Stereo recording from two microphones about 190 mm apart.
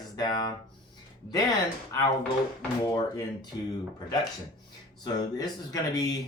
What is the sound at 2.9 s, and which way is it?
Speech, 20° left (ahead or behind).